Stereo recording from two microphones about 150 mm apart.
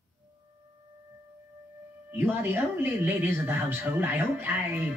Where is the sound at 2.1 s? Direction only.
15° right (ahead or behind).